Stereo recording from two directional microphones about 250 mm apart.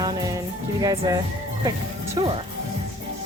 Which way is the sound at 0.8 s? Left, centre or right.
Centre.